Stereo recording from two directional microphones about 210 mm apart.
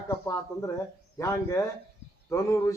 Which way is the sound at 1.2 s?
15° left (ahead or behind).